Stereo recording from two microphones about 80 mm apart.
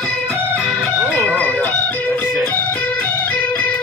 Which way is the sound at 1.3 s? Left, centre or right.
Centre.